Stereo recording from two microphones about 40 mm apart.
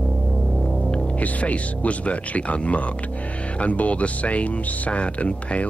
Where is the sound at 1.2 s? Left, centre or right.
Left.